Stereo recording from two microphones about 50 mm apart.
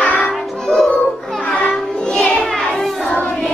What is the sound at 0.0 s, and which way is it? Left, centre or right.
Music, left.